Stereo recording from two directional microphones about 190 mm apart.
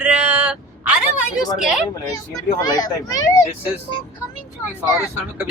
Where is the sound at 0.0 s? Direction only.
5° right (ahead or behind).